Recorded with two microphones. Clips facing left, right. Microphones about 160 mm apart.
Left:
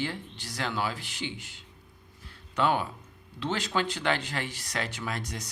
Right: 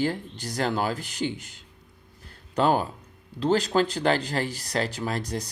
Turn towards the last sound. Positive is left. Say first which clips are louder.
# right 6 dB
turn(degrees=-35)  # may be behind; listen again after turning